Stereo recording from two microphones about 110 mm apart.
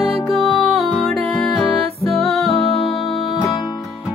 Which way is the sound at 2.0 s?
65° right (ahead or behind).